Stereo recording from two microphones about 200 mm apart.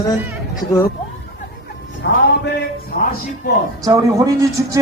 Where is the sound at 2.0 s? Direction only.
55° left (ahead or behind).